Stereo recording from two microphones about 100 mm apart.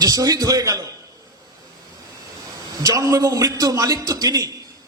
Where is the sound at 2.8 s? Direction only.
35° right (ahead or behind).